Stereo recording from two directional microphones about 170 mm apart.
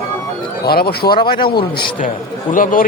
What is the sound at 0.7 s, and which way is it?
Speech, 65° left (ahead or behind).